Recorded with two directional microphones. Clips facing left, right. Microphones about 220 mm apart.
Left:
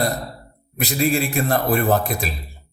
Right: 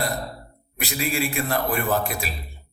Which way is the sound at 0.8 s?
35° left (ahead or behind).